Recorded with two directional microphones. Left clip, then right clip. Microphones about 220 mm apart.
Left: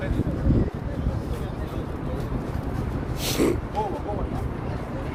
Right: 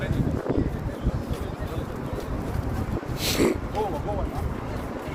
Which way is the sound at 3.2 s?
10° left (ahead or behind).